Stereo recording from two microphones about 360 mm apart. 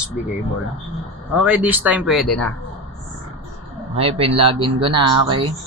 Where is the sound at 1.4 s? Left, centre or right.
Centre.